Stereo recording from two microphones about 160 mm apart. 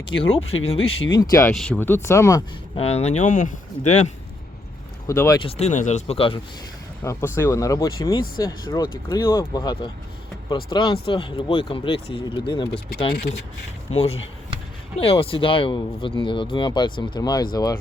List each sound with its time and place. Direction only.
0.2 s speech: 40° left (ahead or behind)
1.2 s speech: 20° left (ahead or behind)
1.5 s speech: centre (ahead or behind)
1.8 s speech: 15° left (ahead or behind)
2.7 s speech: 40° left (ahead or behind)
5.0 s speech: 20° left (ahead or behind)
5.4 s speech: 40° left (ahead or behind)
7.0 s speech: 20° left (ahead or behind)
13.9 s speech: 40° left (ahead or behind)